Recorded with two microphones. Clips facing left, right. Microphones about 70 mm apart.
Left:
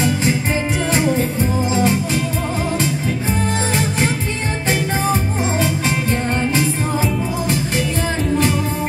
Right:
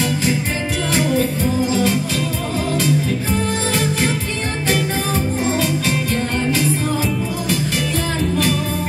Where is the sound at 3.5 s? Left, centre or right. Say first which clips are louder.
Even; left.